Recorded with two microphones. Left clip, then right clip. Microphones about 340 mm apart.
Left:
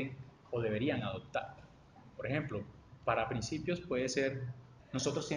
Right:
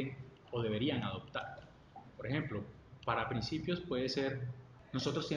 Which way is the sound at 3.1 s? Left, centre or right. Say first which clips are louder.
Left 2 dB; left.